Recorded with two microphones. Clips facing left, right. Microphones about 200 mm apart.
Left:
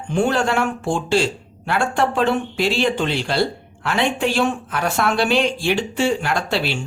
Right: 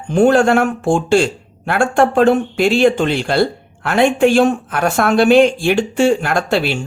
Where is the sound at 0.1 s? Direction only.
50° right (ahead or behind).